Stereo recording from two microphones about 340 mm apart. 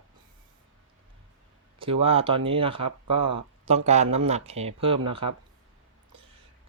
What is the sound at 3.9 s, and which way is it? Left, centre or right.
Speech, centre.